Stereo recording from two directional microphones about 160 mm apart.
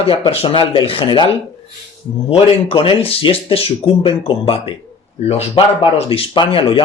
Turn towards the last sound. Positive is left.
turn(degrees=35)  # may be behind; listen again after turning